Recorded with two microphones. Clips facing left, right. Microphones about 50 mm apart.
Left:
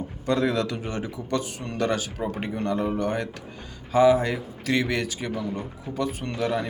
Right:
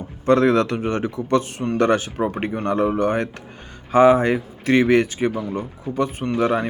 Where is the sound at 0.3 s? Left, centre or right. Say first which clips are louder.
Right 8 dB; right.